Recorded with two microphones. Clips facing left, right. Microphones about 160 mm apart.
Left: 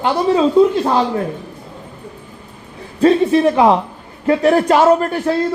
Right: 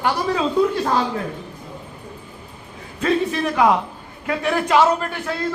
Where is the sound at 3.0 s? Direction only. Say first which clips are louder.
Left 9 dB; 30° left (ahead or behind).